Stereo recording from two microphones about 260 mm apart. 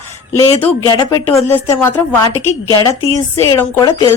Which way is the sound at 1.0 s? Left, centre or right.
Centre.